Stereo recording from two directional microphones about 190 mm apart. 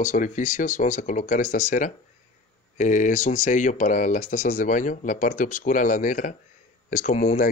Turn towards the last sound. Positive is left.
turn(degrees=40)  # may be behind; listen again after turning